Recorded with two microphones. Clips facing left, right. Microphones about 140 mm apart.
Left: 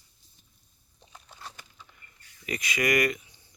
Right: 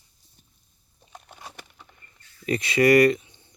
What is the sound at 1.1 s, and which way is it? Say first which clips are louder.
Crumpling: right 6 dB; 60° right (ahead or behind).